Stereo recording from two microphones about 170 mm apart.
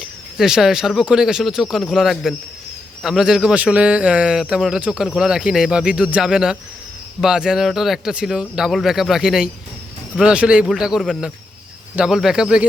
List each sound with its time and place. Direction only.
0.0 s a man's voice: 5° right (ahead or behind)